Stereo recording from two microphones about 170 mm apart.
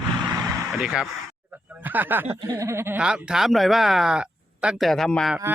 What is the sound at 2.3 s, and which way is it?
Speech, 20° right (ahead or behind).